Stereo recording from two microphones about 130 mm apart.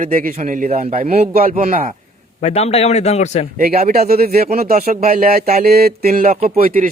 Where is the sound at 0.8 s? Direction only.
65° right (ahead or behind).